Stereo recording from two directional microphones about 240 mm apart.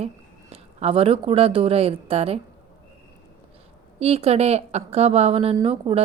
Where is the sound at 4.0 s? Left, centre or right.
Right.